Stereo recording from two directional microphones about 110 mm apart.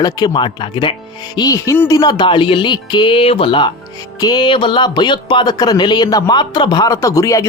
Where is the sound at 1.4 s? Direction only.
30° left (ahead or behind); by 3.7 s 50° left (ahead or behind).